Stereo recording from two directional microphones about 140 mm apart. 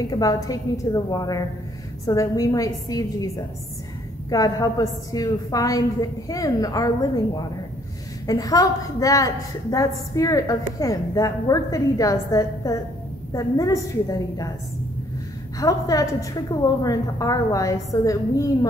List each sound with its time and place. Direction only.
0.1 s a woman's voice: 25° left (ahead or behind)
4.3 s a woman's voice: 25° left (ahead or behind)
15.6 s a woman's voice: 25° left (ahead or behind)